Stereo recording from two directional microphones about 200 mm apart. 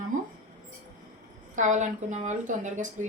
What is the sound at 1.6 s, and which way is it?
A woman's voice, 40° right (ahead or behind).